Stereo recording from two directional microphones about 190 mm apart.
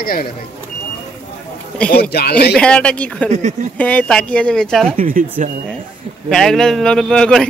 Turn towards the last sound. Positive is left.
turn(degrees=5)  # may be behind; listen again after turning